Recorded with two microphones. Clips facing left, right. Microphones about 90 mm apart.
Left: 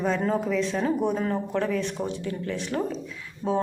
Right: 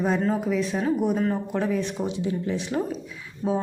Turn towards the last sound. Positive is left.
turn(degrees=-10)  # may be behind; listen again after turning